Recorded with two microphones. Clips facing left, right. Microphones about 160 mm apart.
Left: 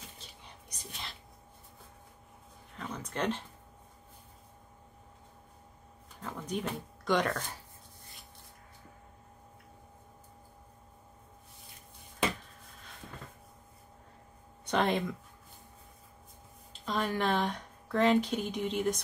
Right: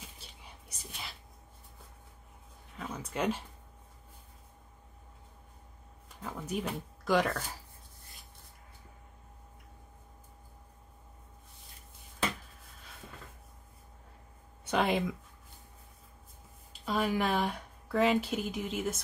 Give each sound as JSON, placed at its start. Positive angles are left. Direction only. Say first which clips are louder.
{"t": 0.2, "sound": "whispering", "louder": "left 1 dB", "side_deg": -5}
{"t": 2.7, "sound": "a sound", "louder": "even", "side_deg": -5}
{"t": 6.2, "sound": "speech", "louder": "even", "side_deg": -5}
{"t": 14.6, "sound": "speech", "louder": "even", "side_deg": -5}
{"t": 16.8, "sound": "speech", "louder": "right 1 dB", "side_deg": -5}